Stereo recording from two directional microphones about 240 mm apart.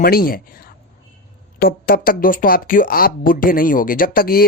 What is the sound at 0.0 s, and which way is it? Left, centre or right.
Speech, left.